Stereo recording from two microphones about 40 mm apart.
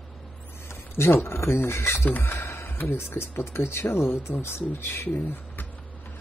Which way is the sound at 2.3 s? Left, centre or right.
Left.